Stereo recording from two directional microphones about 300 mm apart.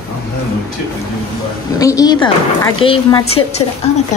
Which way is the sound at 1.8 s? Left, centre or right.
Centre.